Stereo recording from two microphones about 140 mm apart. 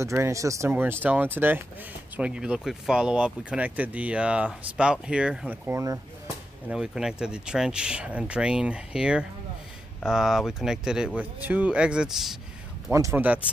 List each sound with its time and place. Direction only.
0.0 s speech: 20° right (ahead or behind)
5.7 s speech: 20° right (ahead or behind)
6.7 s speech: 5° right (ahead or behind)
12.9 s speech: 20° right (ahead or behind)